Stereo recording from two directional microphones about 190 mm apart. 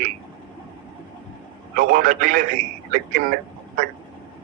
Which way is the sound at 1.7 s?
45° right (ahead or behind).